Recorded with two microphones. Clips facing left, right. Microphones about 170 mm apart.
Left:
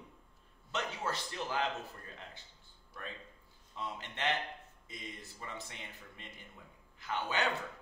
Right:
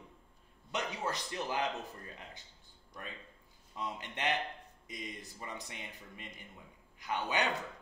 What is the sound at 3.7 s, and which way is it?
A man's voice, 15° right (ahead or behind).